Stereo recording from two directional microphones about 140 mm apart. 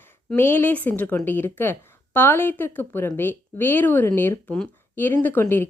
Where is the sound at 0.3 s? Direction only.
15° left (ahead or behind).